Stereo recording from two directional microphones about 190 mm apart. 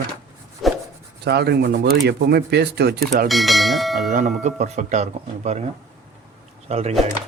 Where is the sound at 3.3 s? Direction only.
Centre (ahead or behind).